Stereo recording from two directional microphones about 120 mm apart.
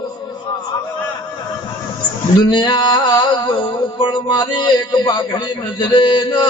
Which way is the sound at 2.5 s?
40° left (ahead or behind).